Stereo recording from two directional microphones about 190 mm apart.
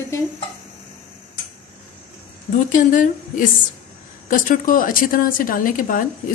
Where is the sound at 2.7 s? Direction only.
45° left (ahead or behind).